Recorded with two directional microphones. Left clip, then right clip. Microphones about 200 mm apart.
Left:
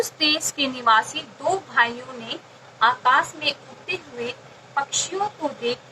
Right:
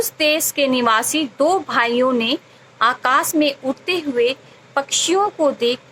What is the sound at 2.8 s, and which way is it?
Speech, 45° right (ahead or behind).